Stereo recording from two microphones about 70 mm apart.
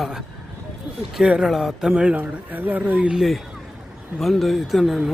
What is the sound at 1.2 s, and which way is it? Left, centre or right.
Speech, centre.